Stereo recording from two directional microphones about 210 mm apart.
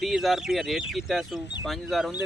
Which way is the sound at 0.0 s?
Centre (ahead or behind).